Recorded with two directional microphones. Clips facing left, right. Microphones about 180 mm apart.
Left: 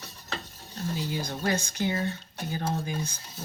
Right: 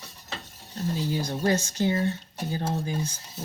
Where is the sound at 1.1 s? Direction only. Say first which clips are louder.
Right 4 dB; 35° right (ahead or behind).